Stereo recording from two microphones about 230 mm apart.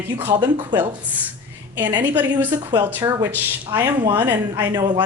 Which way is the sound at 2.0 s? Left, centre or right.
Centre.